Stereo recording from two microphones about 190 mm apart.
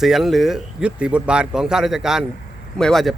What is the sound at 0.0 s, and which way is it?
Speech, centre (ahead or behind).